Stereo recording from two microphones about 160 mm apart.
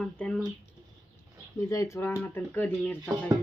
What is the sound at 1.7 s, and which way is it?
Speech, 20° left (ahead or behind).